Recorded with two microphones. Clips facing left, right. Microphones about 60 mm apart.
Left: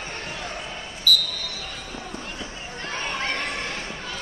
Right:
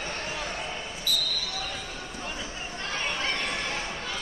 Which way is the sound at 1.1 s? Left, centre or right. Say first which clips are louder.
Left 9 dB; centre.